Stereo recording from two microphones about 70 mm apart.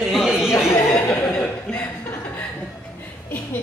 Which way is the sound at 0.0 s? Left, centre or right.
Centre.